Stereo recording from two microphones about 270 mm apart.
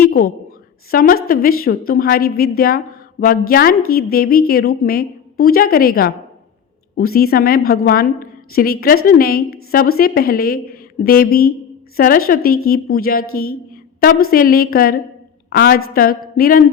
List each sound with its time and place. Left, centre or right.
0.9 s a woman's voice: left